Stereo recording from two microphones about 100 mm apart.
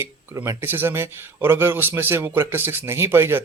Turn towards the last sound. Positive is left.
turn(degrees=-25)  # may be behind; listen again after turning